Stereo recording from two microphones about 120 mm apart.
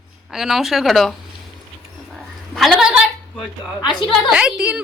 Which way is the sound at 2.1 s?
Centre (ahead or behind).